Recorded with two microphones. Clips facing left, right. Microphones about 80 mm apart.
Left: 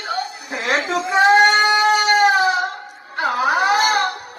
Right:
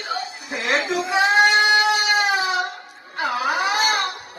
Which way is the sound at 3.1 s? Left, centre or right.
Left.